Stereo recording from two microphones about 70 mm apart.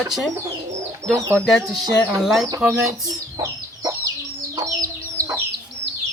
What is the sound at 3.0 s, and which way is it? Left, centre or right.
Chicken, right.